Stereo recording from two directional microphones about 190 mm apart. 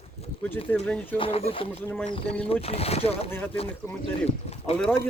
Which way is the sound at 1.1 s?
30° left (ahead or behind).